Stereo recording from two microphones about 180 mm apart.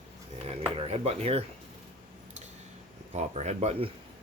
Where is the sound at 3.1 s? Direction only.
40° right (ahead or behind).